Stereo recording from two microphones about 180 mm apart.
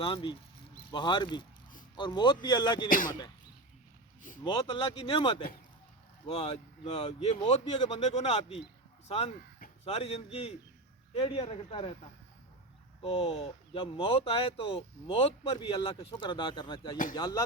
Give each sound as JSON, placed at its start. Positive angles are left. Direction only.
{"t": 0.0, "sound": "speech", "side_deg": 30}
{"t": 4.4, "sound": "speech", "side_deg": 30}
{"t": 13.0, "sound": "speech", "side_deg": 35}